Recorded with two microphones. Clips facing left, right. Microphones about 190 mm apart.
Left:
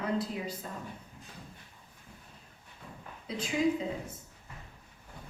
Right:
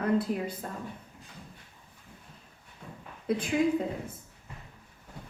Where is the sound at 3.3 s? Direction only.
55° right (ahead or behind).